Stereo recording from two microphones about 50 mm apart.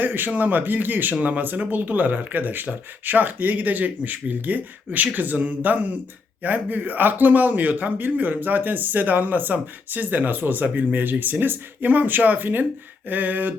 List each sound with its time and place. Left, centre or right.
0.0 s a man's voice: right